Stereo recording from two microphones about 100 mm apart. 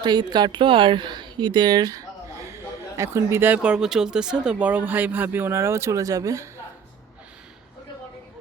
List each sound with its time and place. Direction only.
0.0 s speech: 45° right (ahead or behind)
3.0 s speech: 25° right (ahead or behind)